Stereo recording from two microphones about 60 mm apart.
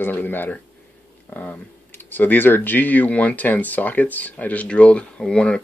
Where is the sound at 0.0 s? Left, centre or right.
Left.